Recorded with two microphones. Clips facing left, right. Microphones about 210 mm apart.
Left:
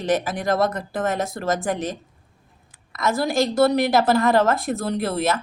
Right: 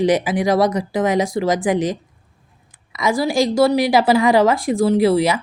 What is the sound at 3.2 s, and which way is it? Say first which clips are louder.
A woman's voice: right 3 dB; 10° right (ahead or behind).